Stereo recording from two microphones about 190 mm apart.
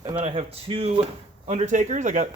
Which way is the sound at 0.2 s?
35° right (ahead or behind).